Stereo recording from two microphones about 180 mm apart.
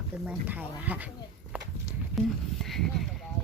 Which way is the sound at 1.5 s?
10° right (ahead or behind).